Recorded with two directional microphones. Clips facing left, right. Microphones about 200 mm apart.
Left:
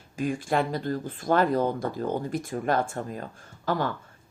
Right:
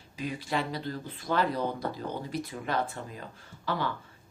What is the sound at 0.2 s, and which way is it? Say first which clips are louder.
A woman's voice: left 6 dB; 50° left (ahead or behind).